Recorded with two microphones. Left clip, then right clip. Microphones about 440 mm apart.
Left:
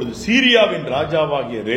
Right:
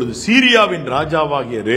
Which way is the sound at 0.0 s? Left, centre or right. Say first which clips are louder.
Right 3 dB; right.